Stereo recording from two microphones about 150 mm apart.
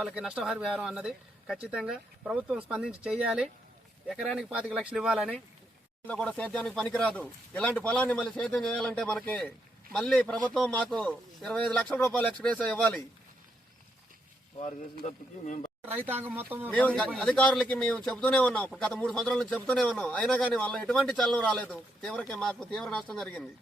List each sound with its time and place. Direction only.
0.0 s a man's voice: 5° right (ahead or behind)
14.6 s speech: 55° left (ahead or behind)
15.9 s speech: 15° right (ahead or behind)
16.6 s a man's voice: 10° left (ahead or behind)